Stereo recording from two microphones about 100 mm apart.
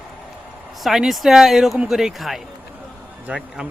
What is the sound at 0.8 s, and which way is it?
Speech, 5° right (ahead or behind).